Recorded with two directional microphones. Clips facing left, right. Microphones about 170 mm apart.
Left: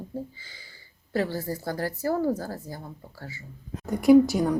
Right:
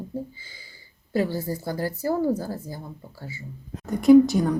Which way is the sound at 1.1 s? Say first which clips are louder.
Right 3 dB; 15° right (ahead or behind).